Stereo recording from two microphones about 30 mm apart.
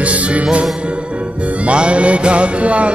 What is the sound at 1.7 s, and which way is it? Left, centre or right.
Music, right.